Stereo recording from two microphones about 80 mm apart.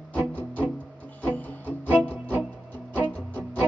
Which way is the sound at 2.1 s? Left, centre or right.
Centre.